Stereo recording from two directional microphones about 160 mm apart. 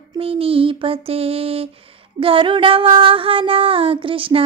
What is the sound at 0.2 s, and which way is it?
Music, 35° right (ahead or behind).